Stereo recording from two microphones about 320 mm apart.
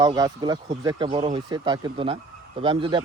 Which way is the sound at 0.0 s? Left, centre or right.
Centre.